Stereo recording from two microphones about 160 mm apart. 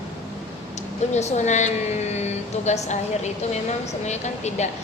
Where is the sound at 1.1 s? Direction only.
45° left (ahead or behind).